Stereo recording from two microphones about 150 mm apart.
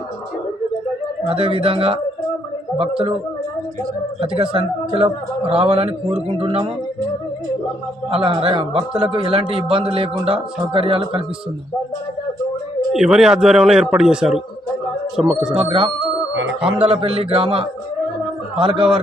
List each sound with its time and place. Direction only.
1.3 s a man's voice: 40° right (ahead or behind)
4.2 s a man's voice: 40° right (ahead or behind)
8.1 s a man's voice: 40° right (ahead or behind)
12.9 s speech: centre (ahead or behind)
15.5 s a man's voice: 40° right (ahead or behind)
16.6 s a man's voice: 5° right (ahead or behind)
16.8 s a man's voice: 40° right (ahead or behind)